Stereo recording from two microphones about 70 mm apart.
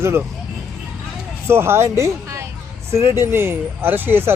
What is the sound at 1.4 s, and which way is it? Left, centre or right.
Speech, right.